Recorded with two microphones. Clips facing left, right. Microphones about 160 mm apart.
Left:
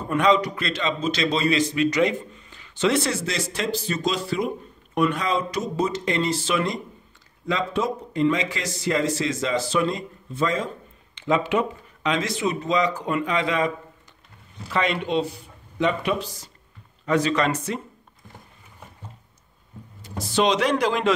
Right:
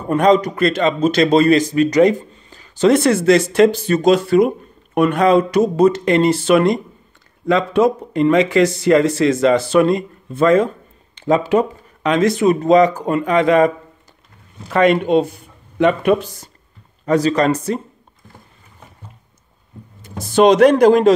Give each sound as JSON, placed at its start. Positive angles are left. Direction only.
{"t": 0.1, "sound": "a man's voice", "side_deg": -45}
{"t": 11.1, "sound": "speech", "side_deg": -40}
{"t": 17.0, "sound": "speech", "side_deg": -40}
{"t": 20.0, "sound": "speech", "side_deg": -50}